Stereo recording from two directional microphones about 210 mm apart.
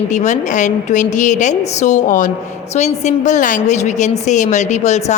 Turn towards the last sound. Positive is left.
turn(degrees=35)  # may be behind; listen again after turning